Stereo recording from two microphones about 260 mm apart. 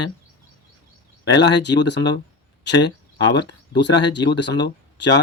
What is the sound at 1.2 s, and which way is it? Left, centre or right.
Speech, left.